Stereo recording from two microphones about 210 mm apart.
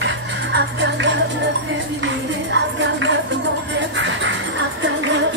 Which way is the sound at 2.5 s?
60° right (ahead or behind).